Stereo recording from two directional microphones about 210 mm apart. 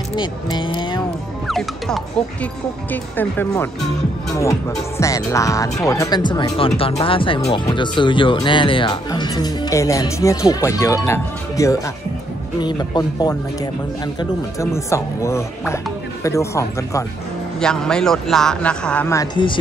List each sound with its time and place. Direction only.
0.1 s speech: 20° left (ahead or behind)
1.5 s a man's voice: 5° left (ahead or behind); by 13.3 s 20° left (ahead or behind)
14.6 s speech: 15° left (ahead or behind)
17.6 s a man's voice: 5° left (ahead or behind)